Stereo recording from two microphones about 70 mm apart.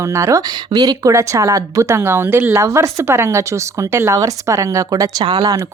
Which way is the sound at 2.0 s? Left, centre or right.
Right.